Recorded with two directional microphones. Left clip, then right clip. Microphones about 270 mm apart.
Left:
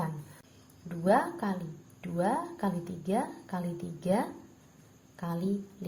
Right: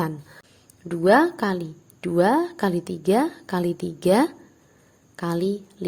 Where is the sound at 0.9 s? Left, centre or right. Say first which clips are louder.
Right 10 dB; right.